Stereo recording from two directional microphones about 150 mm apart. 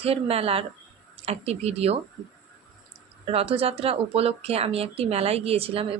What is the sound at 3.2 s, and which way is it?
Speech, 40° right (ahead or behind).